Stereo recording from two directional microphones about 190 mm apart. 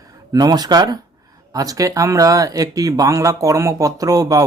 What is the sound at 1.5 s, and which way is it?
Speech, 20° right (ahead or behind).